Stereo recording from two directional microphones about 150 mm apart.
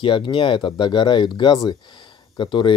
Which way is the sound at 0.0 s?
35° left (ahead or behind).